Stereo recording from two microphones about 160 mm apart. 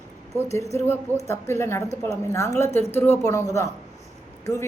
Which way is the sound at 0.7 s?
15° left (ahead or behind).